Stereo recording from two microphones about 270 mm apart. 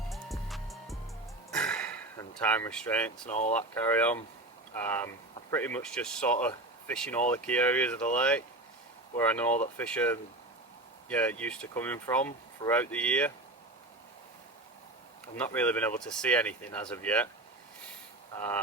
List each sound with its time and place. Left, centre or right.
0.1 s music: centre
1.5 s a sound: centre
3.2 s speech: left
3.5 s speech: centre
15.5 s speech: centre
18.3 s speech: centre